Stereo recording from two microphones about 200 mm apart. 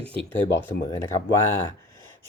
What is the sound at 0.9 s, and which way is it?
Speech, 15° left (ahead or behind).